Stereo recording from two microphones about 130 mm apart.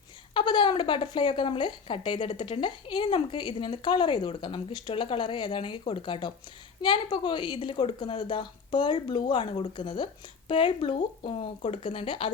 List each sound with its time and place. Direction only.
0.3 s speech: 40° left (ahead or behind)